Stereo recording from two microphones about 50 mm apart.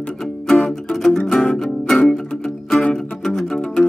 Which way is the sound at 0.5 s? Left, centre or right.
Centre.